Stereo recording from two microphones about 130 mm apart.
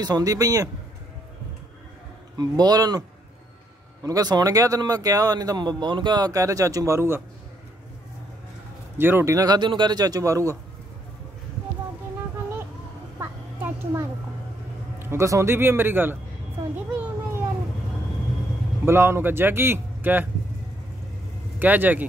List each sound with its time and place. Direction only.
0.0 s speech: 30° right (ahead or behind)
2.3 s speech: 30° right (ahead or behind)
4.0 s speech: 30° right (ahead or behind)
8.9 s speech: 15° right (ahead or behind)
13.2 s a sound: 20° right (ahead or behind)
15.0 s speech: 20° right (ahead or behind)
16.9 s a sound: 15° right (ahead or behind)
18.9 s speech: 20° right (ahead or behind)
21.5 s speech: 15° right (ahead or behind)